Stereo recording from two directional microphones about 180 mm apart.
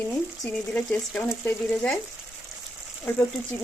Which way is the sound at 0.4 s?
5° left (ahead or behind).